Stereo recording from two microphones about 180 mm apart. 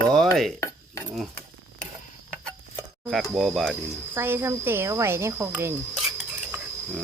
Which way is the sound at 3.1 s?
Centre (ahead or behind).